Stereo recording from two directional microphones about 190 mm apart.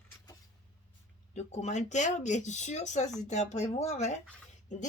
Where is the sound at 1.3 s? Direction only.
35° left (ahead or behind).